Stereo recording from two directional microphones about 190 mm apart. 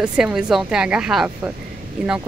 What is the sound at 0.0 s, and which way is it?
A woman's voice, 5° right (ahead or behind).